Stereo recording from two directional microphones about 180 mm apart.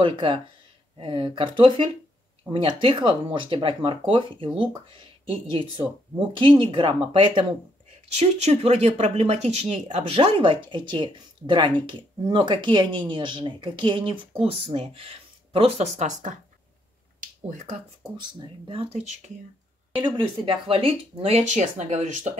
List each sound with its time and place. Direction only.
0.0 s speech: 25° right (ahead or behind); by 16.3 s 40° right (ahead or behind)
17.5 s speech: 40° right (ahead or behind)
20.1 s speech: 30° right (ahead or behind)